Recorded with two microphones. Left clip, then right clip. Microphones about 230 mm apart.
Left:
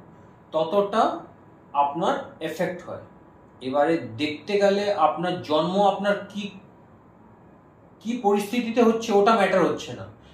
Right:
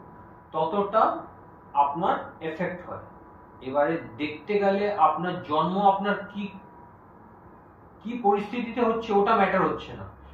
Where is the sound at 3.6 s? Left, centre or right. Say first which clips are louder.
Left 3 dB; left.